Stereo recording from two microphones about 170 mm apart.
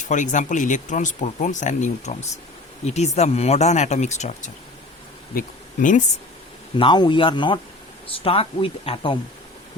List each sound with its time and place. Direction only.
0.0 s speech: 45° left (ahead or behind)
6.7 s speech: 25° left (ahead or behind)